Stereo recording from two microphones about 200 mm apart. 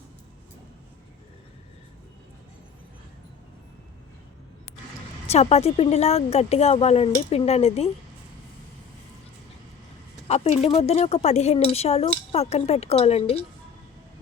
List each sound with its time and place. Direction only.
5.3 s a woman's voice: 30° left (ahead or behind)
10.2 s a woman's voice: 30° left (ahead or behind)